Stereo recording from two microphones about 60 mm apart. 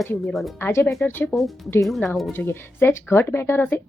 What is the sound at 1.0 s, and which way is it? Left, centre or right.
Speech, left.